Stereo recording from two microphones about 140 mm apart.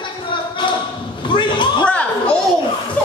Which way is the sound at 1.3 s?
35° left (ahead or behind).